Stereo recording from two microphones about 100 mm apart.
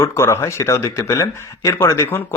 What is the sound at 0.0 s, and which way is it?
Speech, 25° left (ahead or behind).